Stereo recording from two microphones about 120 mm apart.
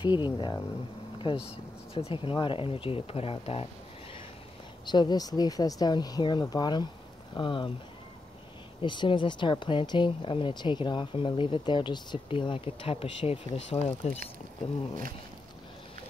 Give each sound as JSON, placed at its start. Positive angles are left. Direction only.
{"t": 0.0, "sound": "speech", "side_deg": 40}
{"t": 1.2, "sound": "speech", "side_deg": 50}
{"t": 4.8, "sound": "speech", "side_deg": 35}
{"t": 8.8, "sound": "speech", "side_deg": 40}